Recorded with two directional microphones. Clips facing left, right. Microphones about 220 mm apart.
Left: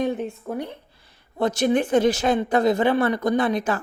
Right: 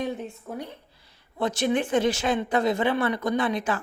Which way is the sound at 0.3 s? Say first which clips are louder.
Left 6 dB; 60° left (ahead or behind).